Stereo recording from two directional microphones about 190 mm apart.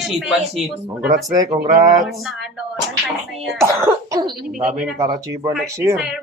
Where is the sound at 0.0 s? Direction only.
Centre (ahead or behind).